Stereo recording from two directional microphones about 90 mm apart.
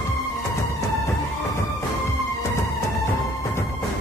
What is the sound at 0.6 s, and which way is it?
Music, 35° left (ahead or behind).